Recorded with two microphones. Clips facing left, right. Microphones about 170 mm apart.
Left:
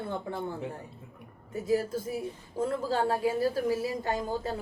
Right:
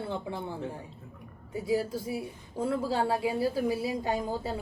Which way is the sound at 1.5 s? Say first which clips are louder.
Left 1 dB; 10° right (ahead or behind).